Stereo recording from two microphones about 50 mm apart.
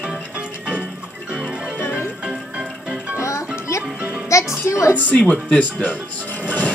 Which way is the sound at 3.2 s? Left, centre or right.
Left.